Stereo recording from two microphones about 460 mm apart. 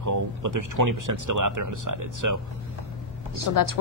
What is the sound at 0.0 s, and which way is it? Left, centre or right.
Speech, right.